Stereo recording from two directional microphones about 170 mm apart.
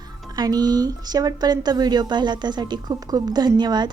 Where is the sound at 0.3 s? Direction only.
20° right (ahead or behind).